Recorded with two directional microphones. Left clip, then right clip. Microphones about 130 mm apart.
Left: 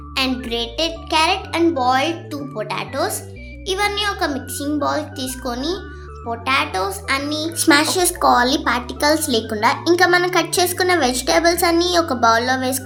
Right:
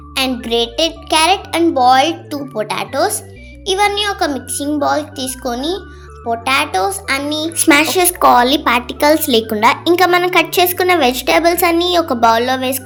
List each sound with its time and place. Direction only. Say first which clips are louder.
0.1 s a child's voice: right 5 dB; 45° right (ahead or behind)